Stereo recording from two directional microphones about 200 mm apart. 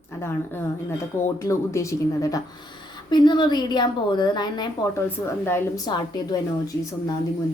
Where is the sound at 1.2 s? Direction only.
15° left (ahead or behind).